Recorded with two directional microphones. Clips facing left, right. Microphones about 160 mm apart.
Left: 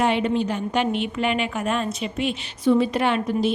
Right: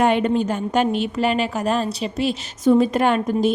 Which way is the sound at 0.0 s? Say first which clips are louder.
Right 3 dB; 50° right (ahead or behind).